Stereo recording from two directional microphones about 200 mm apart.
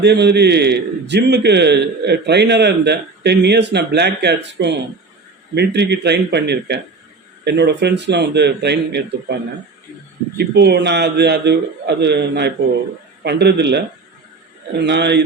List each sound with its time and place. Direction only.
0.0 s a man's voice: 55° right (ahead or behind)
10.3 s a man's voice: 55° right (ahead or behind)